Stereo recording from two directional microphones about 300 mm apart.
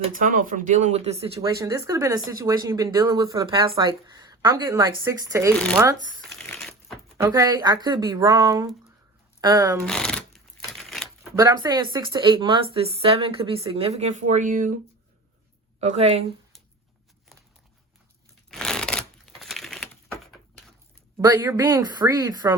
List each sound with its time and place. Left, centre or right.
0.0 s speech: right; by 6.0 s centre
6.3 s a sound: centre
7.2 s speech: centre
9.8 s a sound: centre
11.4 s speech: centre
15.8 s speech: right
18.5 s crumpling: centre
21.2 s speech: centre